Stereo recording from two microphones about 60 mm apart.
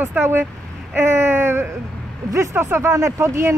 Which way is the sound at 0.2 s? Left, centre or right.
Right.